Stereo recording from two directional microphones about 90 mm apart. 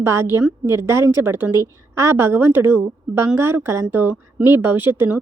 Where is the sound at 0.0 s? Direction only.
30° right (ahead or behind).